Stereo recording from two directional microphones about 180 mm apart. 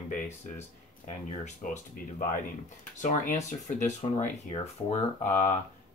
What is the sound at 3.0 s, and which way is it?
Speech, 45° left (ahead or behind).